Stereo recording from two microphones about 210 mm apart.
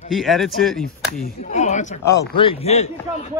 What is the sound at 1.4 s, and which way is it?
Speech, 35° left (ahead or behind).